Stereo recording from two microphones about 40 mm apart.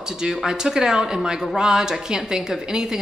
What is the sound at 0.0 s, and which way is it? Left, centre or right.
A woman's voice, centre.